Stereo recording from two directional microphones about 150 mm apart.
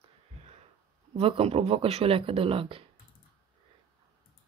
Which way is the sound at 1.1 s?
40° right (ahead or behind).